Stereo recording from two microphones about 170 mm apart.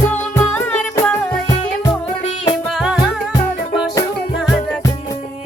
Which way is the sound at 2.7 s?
Centre (ahead or behind).